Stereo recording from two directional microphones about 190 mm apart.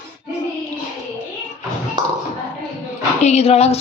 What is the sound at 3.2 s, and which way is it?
Speech, 35° left (ahead or behind).